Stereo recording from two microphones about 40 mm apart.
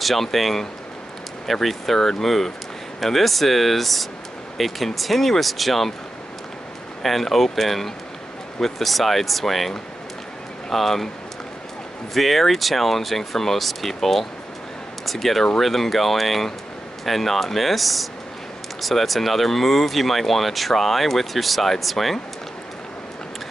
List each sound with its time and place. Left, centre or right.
0.0 s speech: centre
7.0 s speech: centre
12.1 s speech: centre